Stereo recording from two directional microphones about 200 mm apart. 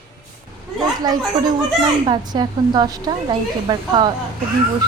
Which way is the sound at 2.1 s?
20° right (ahead or behind).